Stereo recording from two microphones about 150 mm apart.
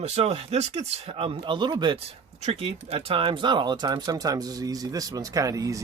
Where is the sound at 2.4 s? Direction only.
40° right (ahead or behind).